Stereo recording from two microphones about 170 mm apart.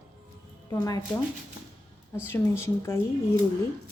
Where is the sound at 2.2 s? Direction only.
15° left (ahead or behind).